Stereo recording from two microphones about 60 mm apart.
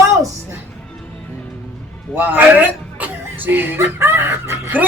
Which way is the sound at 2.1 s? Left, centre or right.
Right.